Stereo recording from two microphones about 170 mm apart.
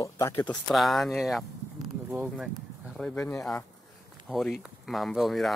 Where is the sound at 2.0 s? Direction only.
15° right (ahead or behind).